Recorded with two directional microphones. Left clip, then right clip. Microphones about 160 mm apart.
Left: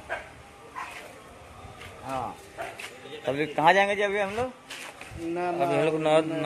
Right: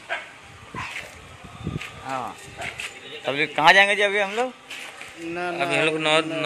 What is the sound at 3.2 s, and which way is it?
Speech, 5° right (ahead or behind).